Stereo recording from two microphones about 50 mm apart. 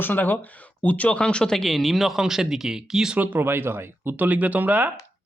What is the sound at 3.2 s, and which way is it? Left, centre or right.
Speech, right.